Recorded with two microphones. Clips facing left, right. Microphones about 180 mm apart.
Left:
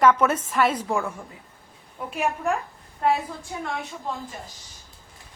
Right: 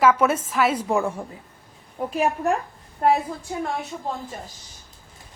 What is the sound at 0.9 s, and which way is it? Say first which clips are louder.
A woman's voice: right 4 dB; 30° right (ahead or behind).